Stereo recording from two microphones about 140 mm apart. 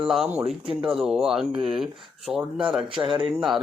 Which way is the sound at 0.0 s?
5° right (ahead or behind).